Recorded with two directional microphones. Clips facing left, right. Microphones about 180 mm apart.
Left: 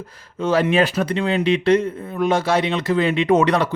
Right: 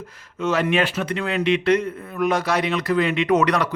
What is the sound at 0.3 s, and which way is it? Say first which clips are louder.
Speech: left 3 dB; 30° left (ahead or behind).